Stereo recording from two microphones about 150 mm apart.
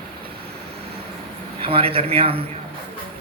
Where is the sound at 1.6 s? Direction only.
40° right (ahead or behind).